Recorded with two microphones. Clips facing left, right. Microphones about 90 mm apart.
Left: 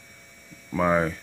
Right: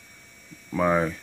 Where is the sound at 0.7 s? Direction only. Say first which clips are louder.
Even; 5° left (ahead or behind).